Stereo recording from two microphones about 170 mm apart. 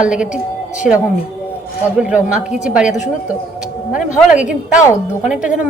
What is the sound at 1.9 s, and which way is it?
A woman's voice, 5° right (ahead or behind).